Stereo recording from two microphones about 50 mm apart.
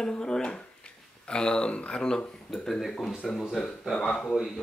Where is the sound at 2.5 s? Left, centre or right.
Centre.